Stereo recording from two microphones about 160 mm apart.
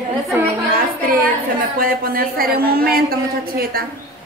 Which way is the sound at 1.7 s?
65° right (ahead or behind).